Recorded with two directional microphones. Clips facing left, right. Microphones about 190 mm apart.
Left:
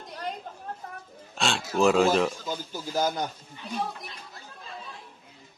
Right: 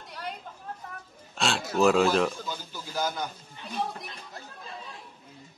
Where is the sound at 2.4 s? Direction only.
40° left (ahead or behind).